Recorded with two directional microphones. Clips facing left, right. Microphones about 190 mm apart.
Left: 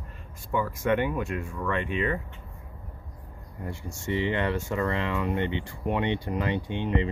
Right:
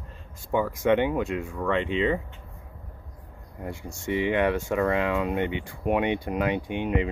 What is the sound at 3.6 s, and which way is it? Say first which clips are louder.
Speech: right 2 dB; 15° right (ahead or behind).